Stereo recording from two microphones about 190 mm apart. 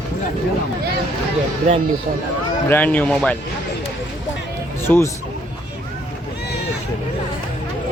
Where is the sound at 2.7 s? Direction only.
10° left (ahead or behind).